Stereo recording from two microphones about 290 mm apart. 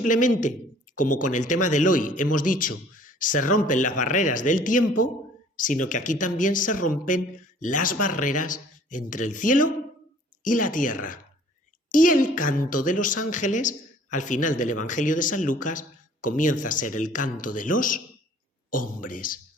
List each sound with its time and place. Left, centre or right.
0.0 s a man's voice: left